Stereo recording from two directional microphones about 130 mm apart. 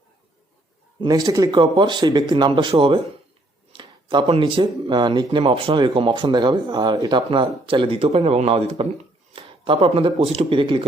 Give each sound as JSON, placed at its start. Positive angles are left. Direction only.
{"t": 1.0, "sound": "speech", "side_deg": -30}